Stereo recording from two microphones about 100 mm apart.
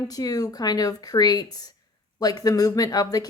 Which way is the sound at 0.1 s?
40° left (ahead or behind).